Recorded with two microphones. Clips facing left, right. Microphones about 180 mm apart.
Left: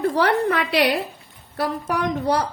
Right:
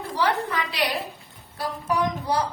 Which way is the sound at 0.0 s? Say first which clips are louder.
Left 6 dB; 65° left (ahead or behind).